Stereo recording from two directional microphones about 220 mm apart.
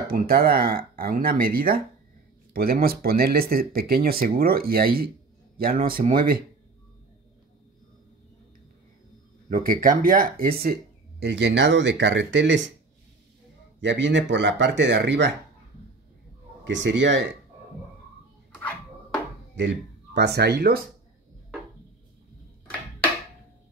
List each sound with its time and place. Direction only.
0.1 s speech: 40° right (ahead or behind)
9.5 s speech: 40° right (ahead or behind); by 12.6 s 55° right (ahead or behind)
13.7 s speech: 55° right (ahead or behind)
16.6 s speech: 55° right (ahead or behind)
19.5 s speech: 50° right (ahead or behind)